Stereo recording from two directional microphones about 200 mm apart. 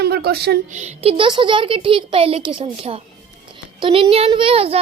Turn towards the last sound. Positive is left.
turn(degrees=-30)  # may be behind; listen again after turning